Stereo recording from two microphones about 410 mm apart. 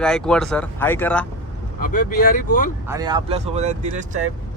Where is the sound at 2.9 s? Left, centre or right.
Centre.